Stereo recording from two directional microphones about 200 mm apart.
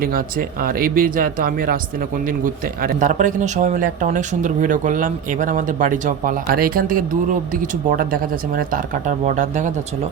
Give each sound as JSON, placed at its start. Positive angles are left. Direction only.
{"t": 0.0, "sound": "speech", "side_deg": -45}